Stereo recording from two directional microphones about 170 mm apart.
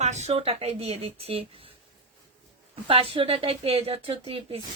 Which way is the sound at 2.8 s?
35° right (ahead or behind).